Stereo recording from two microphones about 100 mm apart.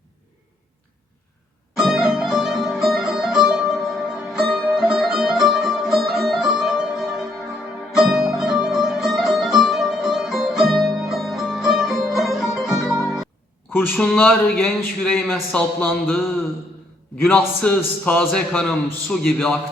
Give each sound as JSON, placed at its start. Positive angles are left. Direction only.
{"t": 1.7, "sound": "music", "side_deg": -5}
{"t": 13.7, "sound": "speech", "side_deg": 20}
{"t": 15.0, "sound": "a man's voice", "side_deg": 10}
{"t": 17.2, "sound": "a man's voice", "side_deg": 15}